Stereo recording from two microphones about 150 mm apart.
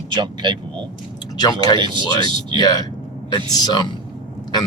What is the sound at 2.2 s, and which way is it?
Speech, 30° right (ahead or behind).